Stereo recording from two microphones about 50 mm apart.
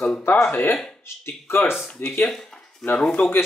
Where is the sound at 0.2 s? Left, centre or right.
Left.